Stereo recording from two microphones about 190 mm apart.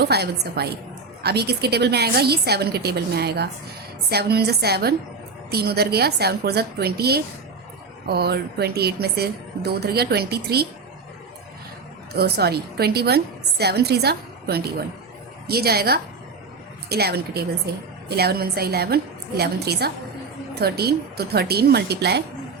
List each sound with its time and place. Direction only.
0.0 s speech: 55° right (ahead or behind)
12.1 s speech: 55° right (ahead or behind)